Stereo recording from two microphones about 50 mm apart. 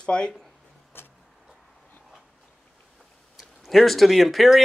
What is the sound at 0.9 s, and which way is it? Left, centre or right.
Vehicle, left.